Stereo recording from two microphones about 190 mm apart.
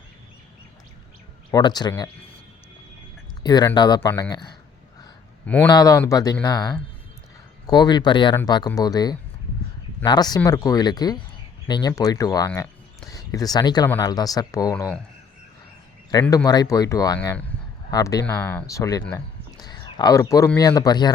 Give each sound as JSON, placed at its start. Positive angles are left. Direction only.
{"t": 1.5, "sound": "speech", "side_deg": 20}
{"t": 3.4, "sound": "speech", "side_deg": 20}
{"t": 5.6, "sound": "speech", "side_deg": 20}
{"t": 16.3, "sound": "speech", "side_deg": 20}
{"t": 17.2, "sound": "speech", "side_deg": 5}
{"t": 17.9, "sound": "speech", "side_deg": 20}
{"t": 19.1, "sound": "a sound", "side_deg": 20}
{"t": 20.0, "sound": "speech", "side_deg": 20}